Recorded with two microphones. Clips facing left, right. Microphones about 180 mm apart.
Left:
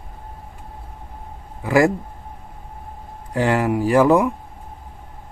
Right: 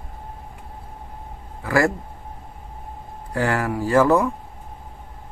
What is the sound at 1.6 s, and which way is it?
Speech, 20° left (ahead or behind).